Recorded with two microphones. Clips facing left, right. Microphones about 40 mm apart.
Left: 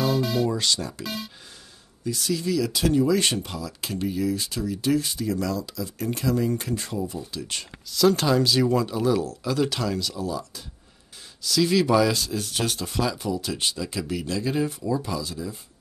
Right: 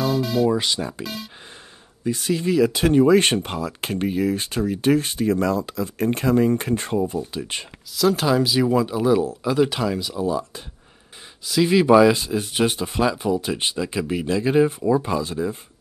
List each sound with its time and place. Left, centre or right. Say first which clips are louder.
0.0 s music: right 3 dB; centre
0.5 s speech: right 4 dB; right
1.0 s speech: right 1 dB; centre
2.0 s speech: right 4 dB; right
7.9 s speech: right 1 dB; centre; by 15.5 s right